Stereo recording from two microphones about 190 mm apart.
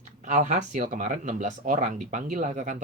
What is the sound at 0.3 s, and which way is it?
Speech, 40° right (ahead or behind).